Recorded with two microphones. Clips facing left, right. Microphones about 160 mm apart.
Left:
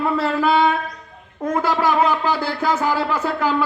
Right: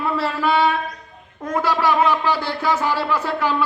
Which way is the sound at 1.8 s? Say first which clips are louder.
Right 1 dB; 45° left (ahead or behind).